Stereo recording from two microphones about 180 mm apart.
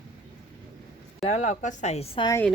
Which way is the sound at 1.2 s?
40° left (ahead or behind).